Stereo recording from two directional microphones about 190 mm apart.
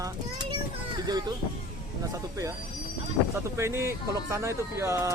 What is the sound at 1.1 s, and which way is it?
A child's voice, 20° right (ahead or behind).